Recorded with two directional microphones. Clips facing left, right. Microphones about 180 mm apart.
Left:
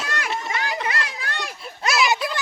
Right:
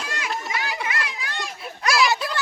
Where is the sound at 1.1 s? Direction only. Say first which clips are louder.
Left 1 dB; 55° left (ahead or behind).